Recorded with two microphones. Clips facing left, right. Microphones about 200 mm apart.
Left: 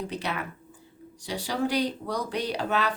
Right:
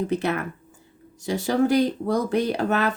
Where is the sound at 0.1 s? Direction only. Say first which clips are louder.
Right 8 dB; 50° right (ahead or behind).